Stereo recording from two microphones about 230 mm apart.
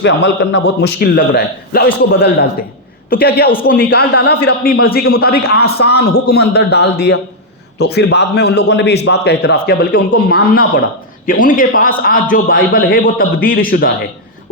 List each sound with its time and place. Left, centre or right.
0.0 s a man's voice: left